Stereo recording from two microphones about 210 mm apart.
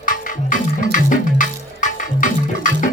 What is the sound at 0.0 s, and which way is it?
Music, 40° left (ahead or behind).